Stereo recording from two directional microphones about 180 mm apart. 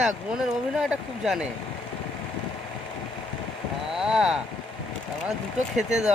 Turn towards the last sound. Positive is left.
turn(degrees=-5)  # may be behind; listen again after turning